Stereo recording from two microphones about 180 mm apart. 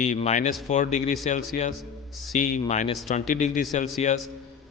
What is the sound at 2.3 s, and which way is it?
A man's voice, 45° left (ahead or behind).